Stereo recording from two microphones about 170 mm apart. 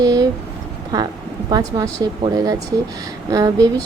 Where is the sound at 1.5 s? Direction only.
25° right (ahead or behind).